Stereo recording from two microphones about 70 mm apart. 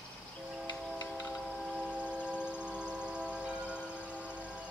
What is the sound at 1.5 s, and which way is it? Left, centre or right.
Siren, centre.